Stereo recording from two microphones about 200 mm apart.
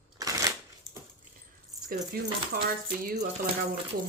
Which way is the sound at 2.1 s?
50° right (ahead or behind).